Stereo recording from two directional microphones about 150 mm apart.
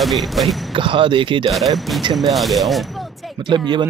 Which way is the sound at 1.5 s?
Centre (ahead or behind).